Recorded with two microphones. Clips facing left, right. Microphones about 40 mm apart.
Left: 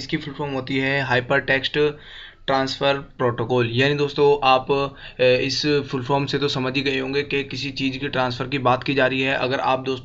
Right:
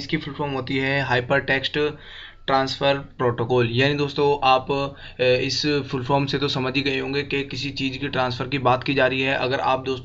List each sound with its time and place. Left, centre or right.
0.1 s speech: centre